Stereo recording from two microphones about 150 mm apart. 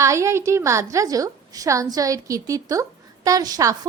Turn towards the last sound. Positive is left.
turn(degrees=-25)  # may be behind; listen again after turning